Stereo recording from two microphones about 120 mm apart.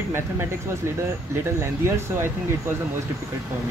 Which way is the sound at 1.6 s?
20° right (ahead or behind).